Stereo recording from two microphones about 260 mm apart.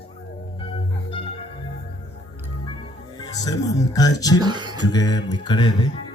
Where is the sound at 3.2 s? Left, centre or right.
Centre.